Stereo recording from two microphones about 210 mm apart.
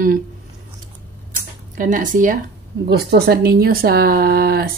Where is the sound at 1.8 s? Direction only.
40° right (ahead or behind).